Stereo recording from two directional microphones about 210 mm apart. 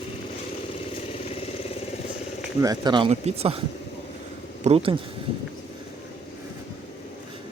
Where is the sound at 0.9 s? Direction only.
30° left (ahead or behind).